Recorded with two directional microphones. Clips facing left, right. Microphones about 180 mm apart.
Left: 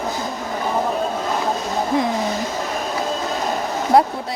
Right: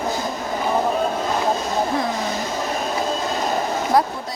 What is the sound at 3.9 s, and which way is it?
Speech, 25° left (ahead or behind).